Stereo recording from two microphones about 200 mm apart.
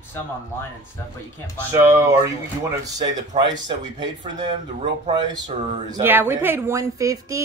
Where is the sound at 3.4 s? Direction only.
20° right (ahead or behind).